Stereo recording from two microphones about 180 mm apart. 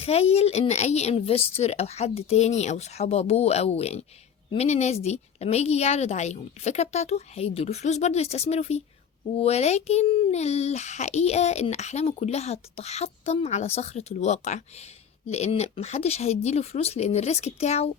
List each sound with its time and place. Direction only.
0.0 s a child's voice: 35° left (ahead or behind)